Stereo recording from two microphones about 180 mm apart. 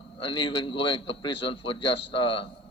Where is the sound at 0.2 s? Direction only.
30° left (ahead or behind).